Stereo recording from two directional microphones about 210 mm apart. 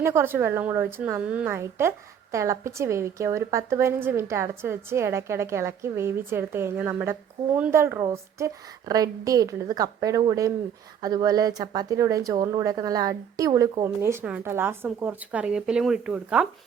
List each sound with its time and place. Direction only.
0.0 s a woman's voice: 10° right (ahead or behind)